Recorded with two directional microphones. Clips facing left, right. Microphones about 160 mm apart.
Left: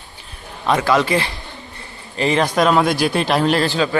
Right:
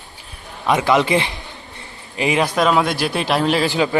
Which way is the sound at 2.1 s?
10° right (ahead or behind).